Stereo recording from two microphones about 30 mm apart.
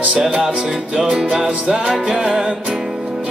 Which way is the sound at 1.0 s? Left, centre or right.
Centre.